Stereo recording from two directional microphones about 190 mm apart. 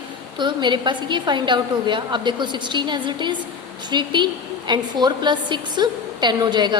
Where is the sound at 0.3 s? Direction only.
25° right (ahead or behind).